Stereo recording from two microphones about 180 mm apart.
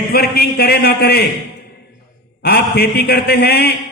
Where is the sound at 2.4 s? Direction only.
65° left (ahead or behind).